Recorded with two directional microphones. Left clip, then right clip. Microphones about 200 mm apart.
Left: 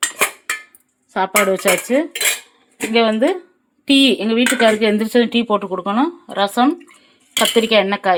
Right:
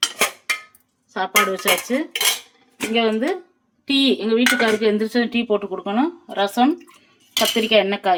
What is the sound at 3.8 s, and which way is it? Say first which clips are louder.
Speech: left 5 dB; 50° left (ahead or behind).